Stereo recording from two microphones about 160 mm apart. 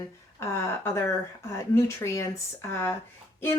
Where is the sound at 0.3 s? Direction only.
15° left (ahead or behind).